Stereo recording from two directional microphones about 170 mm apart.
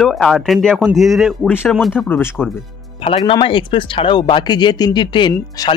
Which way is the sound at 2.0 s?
10° left (ahead or behind).